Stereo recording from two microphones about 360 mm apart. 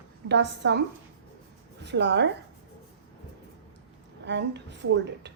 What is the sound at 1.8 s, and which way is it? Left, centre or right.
Speech, right.